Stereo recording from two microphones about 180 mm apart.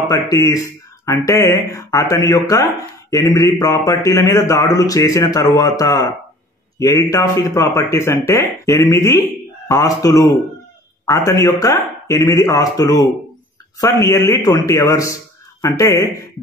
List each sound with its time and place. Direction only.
0.0 s a man's voice: 20° left (ahead or behind)